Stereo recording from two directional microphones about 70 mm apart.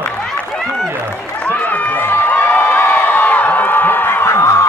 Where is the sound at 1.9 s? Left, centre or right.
Left.